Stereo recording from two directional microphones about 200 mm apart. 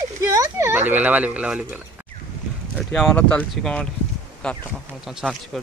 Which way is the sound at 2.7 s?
Centre (ahead or behind).